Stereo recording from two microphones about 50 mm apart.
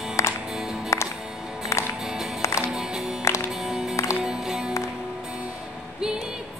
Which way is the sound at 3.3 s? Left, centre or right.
Left.